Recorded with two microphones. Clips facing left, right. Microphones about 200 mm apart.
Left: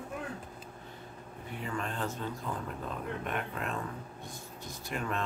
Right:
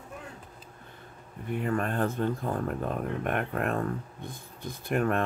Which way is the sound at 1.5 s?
55° right (ahead or behind).